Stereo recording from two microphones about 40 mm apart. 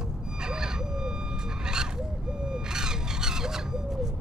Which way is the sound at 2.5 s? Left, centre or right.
Centre.